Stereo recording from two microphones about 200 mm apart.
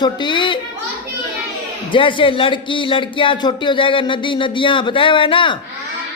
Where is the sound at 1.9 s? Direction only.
25° left (ahead or behind).